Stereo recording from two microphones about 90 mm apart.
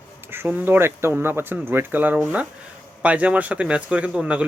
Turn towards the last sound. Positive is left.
turn(degrees=-10)  # may be behind; listen again after turning